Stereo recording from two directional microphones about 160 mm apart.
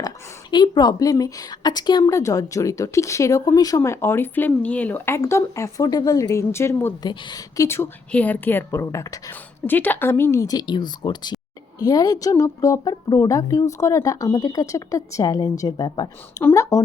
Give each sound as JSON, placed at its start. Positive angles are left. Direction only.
{"t": 0.5, "sound": "a woman's voice", "side_deg": 30}
{"t": 7.1, "sound": "a woman's voice", "side_deg": 30}